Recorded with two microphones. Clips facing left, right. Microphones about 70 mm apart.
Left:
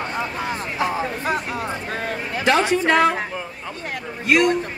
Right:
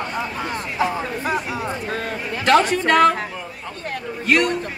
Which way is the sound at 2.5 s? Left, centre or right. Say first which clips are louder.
Right 2 dB; centre.